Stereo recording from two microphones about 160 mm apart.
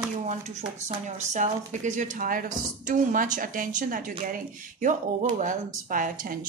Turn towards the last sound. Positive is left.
turn(degrees=-60)  # may be behind; listen again after turning